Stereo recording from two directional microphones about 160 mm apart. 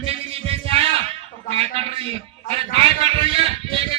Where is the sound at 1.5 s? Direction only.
40° right (ahead or behind).